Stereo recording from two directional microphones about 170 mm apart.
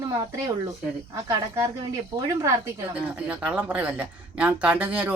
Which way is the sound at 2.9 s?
5° right (ahead or behind).